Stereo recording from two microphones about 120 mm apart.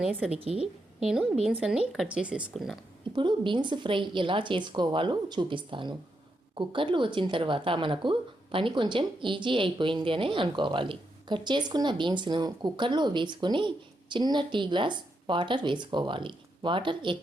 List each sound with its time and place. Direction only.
0.0 s speech: 10° right (ahead or behind)
0.3 s speech: 55° right (ahead or behind)
0.6 s speech: 5° right (ahead or behind)
3.2 s a woman's voice: 45° right (ahead or behind)